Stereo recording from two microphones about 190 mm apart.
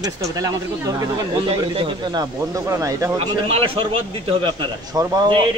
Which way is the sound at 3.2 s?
30° right (ahead or behind).